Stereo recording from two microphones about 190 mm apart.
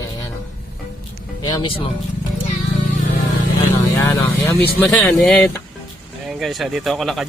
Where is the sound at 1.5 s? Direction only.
25° left (ahead or behind).